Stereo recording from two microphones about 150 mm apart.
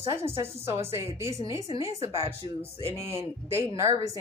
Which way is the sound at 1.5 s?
20° right (ahead or behind).